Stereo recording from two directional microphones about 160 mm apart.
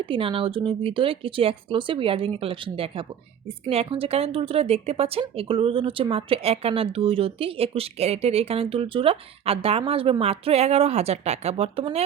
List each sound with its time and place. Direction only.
0.0 s speech: 35° right (ahead or behind)